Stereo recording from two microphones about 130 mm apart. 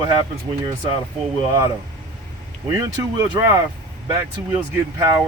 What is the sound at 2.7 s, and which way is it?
Speech, 25° right (ahead or behind).